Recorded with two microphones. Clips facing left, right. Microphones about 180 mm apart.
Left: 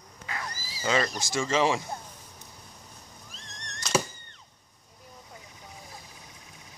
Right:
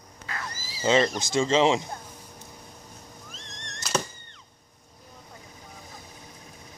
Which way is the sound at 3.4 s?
35° right (ahead or behind).